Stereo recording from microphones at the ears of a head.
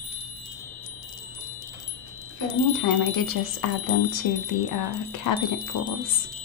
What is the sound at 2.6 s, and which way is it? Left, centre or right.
Wind chime, left.